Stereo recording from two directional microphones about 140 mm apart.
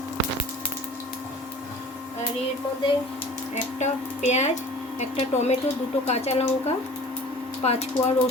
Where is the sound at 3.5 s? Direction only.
55° left (ahead or behind).